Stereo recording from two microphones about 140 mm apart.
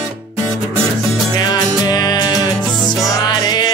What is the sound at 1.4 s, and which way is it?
Music, 30° left (ahead or behind).